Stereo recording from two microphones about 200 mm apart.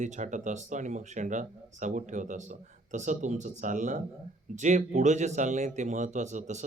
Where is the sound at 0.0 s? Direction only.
40° right (ahead or behind).